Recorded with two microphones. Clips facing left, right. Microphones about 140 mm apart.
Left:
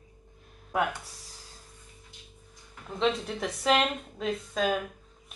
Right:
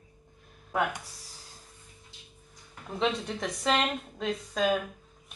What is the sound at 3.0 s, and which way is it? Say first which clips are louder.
A woman's voice: left 2 dB; centre (ahead or behind).